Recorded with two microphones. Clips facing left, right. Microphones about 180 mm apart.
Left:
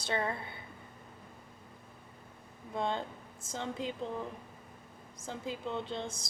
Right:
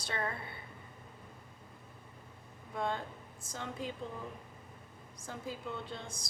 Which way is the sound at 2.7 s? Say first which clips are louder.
Left 2 dB; 25° left (ahead or behind).